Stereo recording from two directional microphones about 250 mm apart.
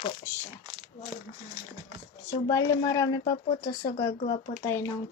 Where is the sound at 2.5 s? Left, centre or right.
Centre.